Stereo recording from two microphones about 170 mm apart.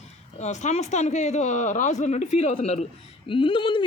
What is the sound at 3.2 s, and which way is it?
Speech, 30° left (ahead or behind).